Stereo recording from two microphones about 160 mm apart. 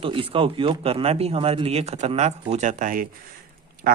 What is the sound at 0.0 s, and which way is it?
A man's voice, 35° right (ahead or behind).